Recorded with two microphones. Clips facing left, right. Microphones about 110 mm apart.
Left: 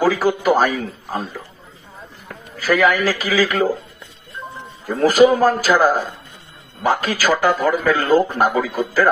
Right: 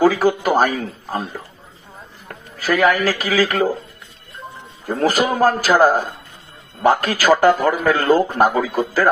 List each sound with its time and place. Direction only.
0.0 s a man's voice: 45° right (ahead or behind)
2.8 s a man's voice: 50° right (ahead or behind)
4.8 s a man's voice: 50° right (ahead or behind)